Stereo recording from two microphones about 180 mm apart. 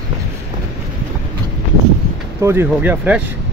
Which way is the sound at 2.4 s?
15° right (ahead or behind).